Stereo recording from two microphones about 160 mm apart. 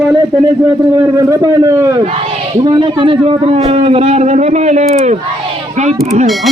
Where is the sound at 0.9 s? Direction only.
20° right (ahead or behind); by 6.0 s 45° right (ahead or behind).